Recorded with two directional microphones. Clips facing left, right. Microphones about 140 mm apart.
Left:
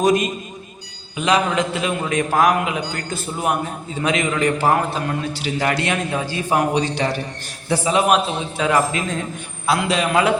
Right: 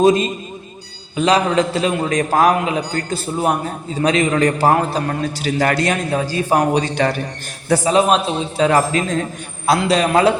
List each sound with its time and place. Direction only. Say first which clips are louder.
0.0 s a man's voice: right 4 dB; 25° right (ahead or behind)